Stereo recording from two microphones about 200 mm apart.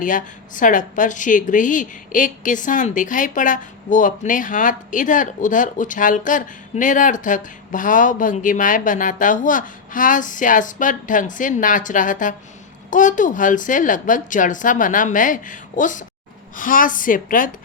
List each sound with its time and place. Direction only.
0.0 s a woman's voice: 40° left (ahead or behind)